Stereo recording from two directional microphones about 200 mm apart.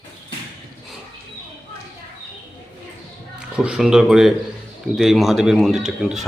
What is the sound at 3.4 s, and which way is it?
A man's voice, 5° right (ahead or behind).